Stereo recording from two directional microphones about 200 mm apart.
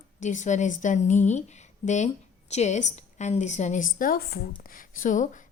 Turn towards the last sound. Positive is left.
turn(degrees=40)  # may be behind; listen again after turning